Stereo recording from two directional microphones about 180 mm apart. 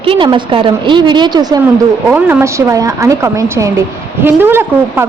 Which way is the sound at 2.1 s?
10° right (ahead or behind).